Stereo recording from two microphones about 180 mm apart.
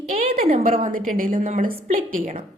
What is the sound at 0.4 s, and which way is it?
Speech, 35° right (ahead or behind).